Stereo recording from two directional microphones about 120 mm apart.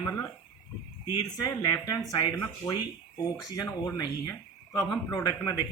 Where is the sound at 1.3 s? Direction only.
30° left (ahead or behind).